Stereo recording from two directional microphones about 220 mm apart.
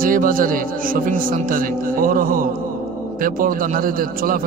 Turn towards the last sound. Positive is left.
turn(degrees=-40)  # may be behind; listen again after turning